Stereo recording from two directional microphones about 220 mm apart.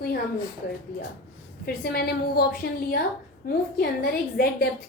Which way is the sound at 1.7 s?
45° left (ahead or behind).